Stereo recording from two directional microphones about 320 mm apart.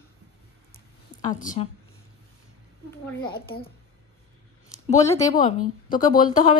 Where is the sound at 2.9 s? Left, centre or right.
Centre.